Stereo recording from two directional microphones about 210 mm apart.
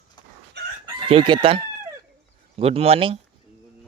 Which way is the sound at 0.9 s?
25° right (ahead or behind).